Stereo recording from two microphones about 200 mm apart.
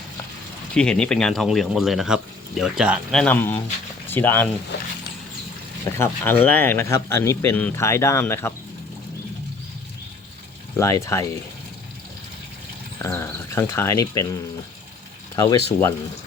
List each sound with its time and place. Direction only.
0.7 s speech: 5° left (ahead or behind)
5.8 s speech: 10° left (ahead or behind)
10.8 s speech: 15° left (ahead or behind)
13.0 s speech: 10° left (ahead or behind)